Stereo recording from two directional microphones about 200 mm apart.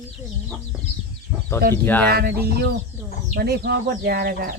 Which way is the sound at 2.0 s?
50° right (ahead or behind).